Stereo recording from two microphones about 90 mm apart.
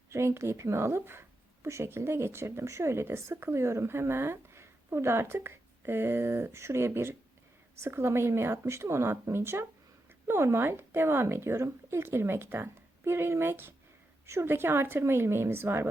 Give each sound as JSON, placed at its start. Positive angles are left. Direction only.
{"t": 0.1, "sound": "a woman's voice", "side_deg": -30}